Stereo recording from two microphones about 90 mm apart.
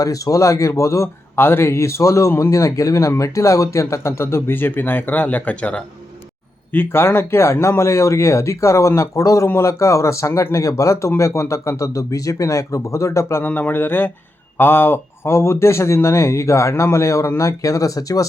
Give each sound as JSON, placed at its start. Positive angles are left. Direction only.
{"t": 0.0, "sound": "a man's voice", "side_deg": 40}
{"t": 6.7, "sound": "a man's voice", "side_deg": 25}